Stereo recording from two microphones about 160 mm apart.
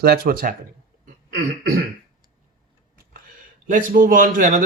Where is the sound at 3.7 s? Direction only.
55° right (ahead or behind).